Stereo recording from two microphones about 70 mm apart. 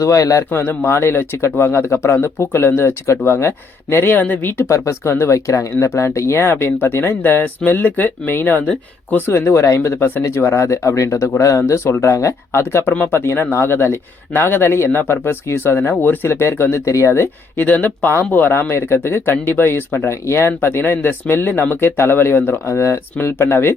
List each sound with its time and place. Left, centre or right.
0.0 s speech: left
0.5 s speech: left
4.7 s speech: left
12.9 s speech: left
13.1 s speech: left
17.6 s speech: left